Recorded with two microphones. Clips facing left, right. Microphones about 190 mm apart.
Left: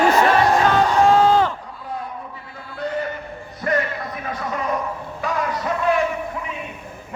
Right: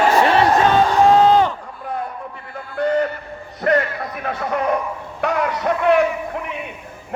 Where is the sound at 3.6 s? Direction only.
60° right (ahead or behind).